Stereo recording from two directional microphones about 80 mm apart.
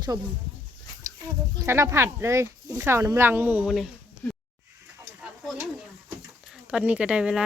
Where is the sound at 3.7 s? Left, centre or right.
Centre.